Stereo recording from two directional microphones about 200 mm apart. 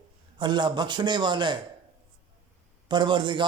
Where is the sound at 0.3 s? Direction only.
20° right (ahead or behind).